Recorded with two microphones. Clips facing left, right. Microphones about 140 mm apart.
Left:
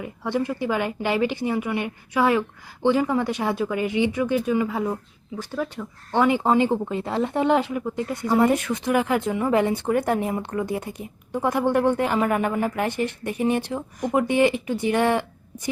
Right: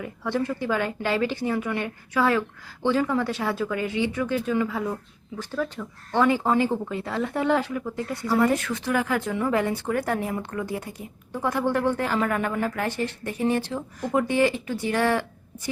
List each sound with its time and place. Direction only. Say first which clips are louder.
0.0 s a woman's voice: left 1 dB; 15° left (ahead or behind)